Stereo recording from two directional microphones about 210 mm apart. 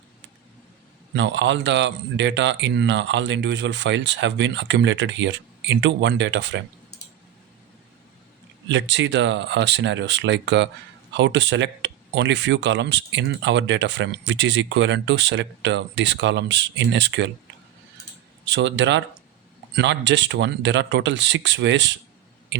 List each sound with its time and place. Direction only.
1.1 s speech: 60° right (ahead or behind)
8.7 s speech: 55° right (ahead or behind)
18.4 s speech: 60° right (ahead or behind)